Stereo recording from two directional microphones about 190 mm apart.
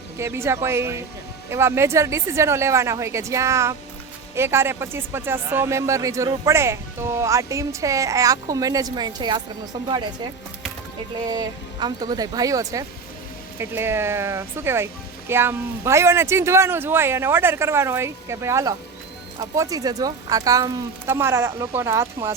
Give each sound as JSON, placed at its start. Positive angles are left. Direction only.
{"t": 0.2, "sound": "speech", "side_deg": -15}
{"t": 11.3, "sound": "speech", "side_deg": -20}